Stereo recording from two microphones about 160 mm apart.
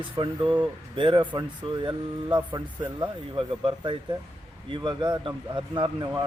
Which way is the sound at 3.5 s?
30° right (ahead or behind).